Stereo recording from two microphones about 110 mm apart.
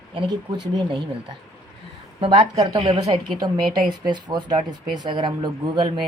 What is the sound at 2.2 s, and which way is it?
Speech, 50° right (ahead or behind).